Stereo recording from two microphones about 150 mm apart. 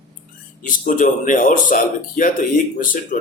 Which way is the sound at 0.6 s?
60° left (ahead or behind).